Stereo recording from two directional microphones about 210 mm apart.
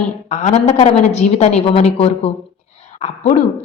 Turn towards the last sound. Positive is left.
turn(degrees=30)  # may be behind; listen again after turning